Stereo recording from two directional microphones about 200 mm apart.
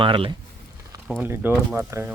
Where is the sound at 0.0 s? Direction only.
25° right (ahead or behind).